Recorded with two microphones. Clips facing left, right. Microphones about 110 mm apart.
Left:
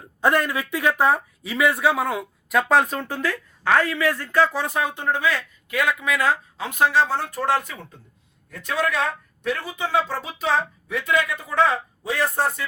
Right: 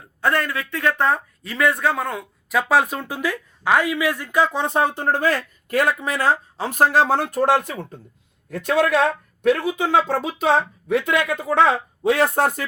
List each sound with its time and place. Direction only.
0.2 s speech: 15° left (ahead or behind); by 7.0 s 40° right (ahead or behind)
7.0 s a man's voice: 60° right (ahead or behind)